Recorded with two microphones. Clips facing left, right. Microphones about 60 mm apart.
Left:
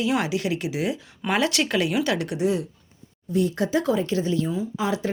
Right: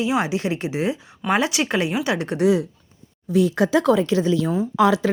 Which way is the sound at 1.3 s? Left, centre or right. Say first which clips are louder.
Right 2 dB; centre.